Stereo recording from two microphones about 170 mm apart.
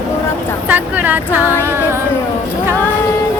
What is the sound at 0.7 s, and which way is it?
Speech, 10° right (ahead or behind).